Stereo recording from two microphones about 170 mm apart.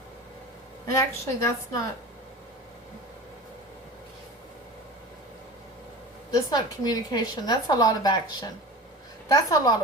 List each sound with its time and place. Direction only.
0.9 s a woman's voice: 20° left (ahead or behind)
6.3 s a woman's voice: 25° left (ahead or behind)